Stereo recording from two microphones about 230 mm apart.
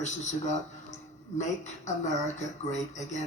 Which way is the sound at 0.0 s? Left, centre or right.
Left.